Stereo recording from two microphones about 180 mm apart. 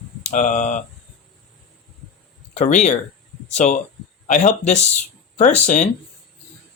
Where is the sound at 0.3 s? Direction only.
45° left (ahead or behind).